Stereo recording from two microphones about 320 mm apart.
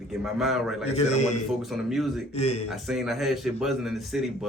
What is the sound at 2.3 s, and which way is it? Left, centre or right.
Speech, centre.